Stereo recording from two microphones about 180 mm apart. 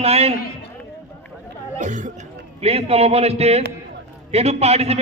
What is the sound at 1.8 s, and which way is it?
A man's voice, 45° right (ahead or behind).